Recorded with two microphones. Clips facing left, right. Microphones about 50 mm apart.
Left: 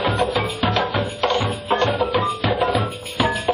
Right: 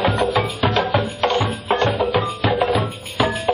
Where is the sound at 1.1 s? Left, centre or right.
Right.